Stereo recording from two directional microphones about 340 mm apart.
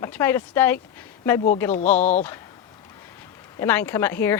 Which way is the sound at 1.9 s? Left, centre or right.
Left.